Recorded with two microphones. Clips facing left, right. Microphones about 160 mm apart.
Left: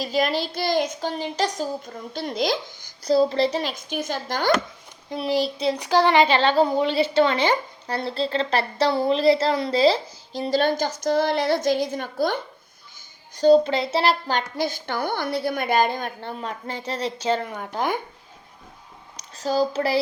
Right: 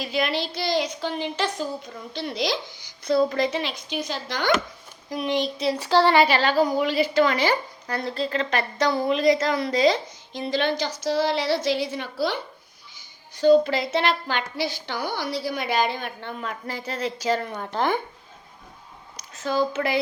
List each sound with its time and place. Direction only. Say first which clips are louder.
0.0 s a woman's voice: left 2 dB; 40° left (ahead or behind)
3.1 s a woman's voice: left 2 dB; 30° left (ahead or behind); by 4.5 s 45° left (ahead or behind)
5.0 s speech: left 2 dB; 30° left (ahead or behind)
5.7 s a woman's voice: even; 15° left (ahead or behind); by 13.6 s 40° left (ahead or behind)
13.7 s a woman's voice: left 2 dB; 30° left (ahead or behind)
17.6 s speech: right 1 dB; 10° left (ahead or behind)
19.4 s a woman's voice: left 2 dB; 35° left (ahead or behind)